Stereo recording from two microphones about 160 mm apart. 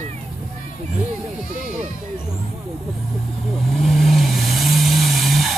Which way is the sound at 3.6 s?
Centre (ahead or behind).